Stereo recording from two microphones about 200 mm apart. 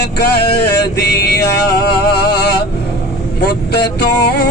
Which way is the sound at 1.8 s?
55° left (ahead or behind).